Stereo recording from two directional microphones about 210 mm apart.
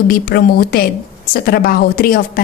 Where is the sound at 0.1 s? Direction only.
45° left (ahead or behind).